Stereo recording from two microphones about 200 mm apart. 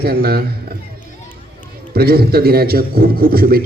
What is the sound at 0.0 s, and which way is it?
Speech, 50° right (ahead or behind).